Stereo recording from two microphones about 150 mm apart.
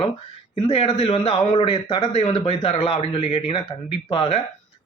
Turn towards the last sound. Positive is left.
turn(degrees=35)  # may be behind; listen again after turning